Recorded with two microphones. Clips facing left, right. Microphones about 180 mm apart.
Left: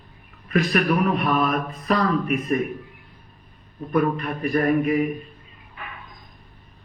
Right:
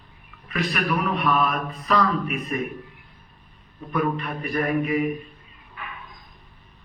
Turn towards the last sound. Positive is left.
turn(degrees=45)  # may be behind; listen again after turning